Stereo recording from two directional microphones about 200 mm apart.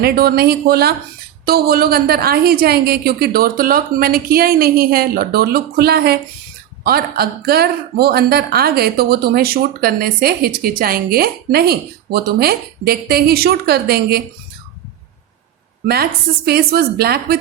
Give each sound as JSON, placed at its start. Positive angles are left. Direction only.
{"t": 0.0, "sound": "speech", "side_deg": -50}
{"t": 16.5, "sound": "speech", "side_deg": -50}